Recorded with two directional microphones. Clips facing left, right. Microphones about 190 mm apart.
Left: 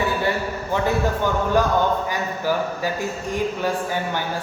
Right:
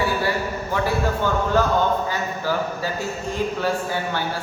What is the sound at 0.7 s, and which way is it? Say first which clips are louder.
A man's voice: left 2 dB; 15° left (ahead or behind).